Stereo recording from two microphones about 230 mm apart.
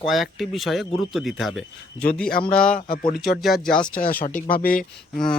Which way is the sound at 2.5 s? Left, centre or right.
Left.